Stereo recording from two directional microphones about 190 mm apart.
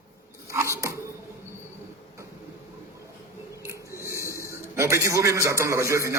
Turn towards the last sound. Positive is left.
turn(degrees=-15)  # may be behind; listen again after turning